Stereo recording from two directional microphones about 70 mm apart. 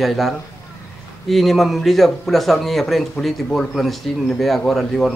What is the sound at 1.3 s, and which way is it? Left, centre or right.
A man's voice, centre.